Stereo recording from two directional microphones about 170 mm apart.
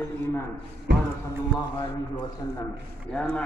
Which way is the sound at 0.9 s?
90° right.